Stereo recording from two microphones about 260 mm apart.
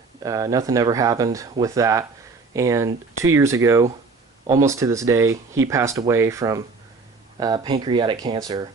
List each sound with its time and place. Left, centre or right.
0.2 s speech: centre